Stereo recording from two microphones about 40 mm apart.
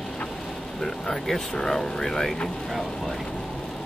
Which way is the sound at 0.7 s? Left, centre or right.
Centre.